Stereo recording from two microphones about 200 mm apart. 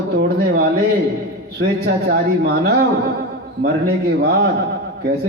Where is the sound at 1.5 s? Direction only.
50° right (ahead or behind).